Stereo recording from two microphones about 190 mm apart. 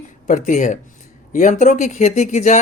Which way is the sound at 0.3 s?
40° left (ahead or behind).